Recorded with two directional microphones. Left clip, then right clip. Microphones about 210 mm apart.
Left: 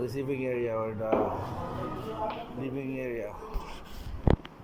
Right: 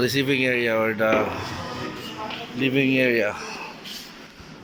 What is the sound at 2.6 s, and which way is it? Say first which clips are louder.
Speech: right 17 dB; 55° right (ahead or behind).